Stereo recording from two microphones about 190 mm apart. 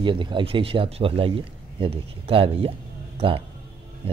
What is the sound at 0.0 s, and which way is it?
Speech, 25° right (ahead or behind).